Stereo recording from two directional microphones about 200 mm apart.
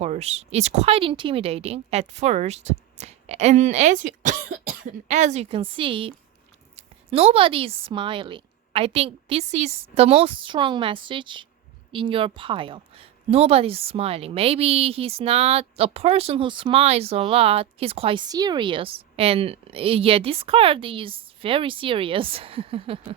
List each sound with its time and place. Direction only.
0.0 s a woman's voice: 35° right (ahead or behind)